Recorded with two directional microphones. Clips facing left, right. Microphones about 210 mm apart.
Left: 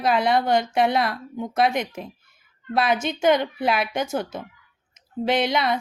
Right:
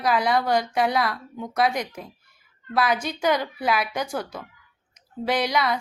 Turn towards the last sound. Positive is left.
turn(degrees=25)  # may be behind; listen again after turning